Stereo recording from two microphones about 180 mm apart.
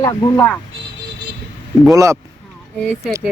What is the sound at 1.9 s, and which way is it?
Speech, 15° right (ahead or behind).